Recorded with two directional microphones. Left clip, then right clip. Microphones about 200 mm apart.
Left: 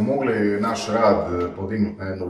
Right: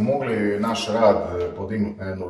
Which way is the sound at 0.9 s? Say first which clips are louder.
Right 1 dB; centre (ahead or behind).